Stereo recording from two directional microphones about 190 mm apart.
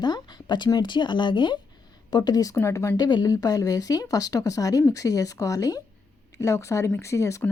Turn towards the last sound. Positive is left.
turn(degrees=15)  # may be behind; listen again after turning